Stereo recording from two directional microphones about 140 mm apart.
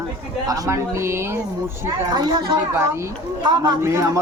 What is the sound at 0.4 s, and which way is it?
Speech, 25° right (ahead or behind).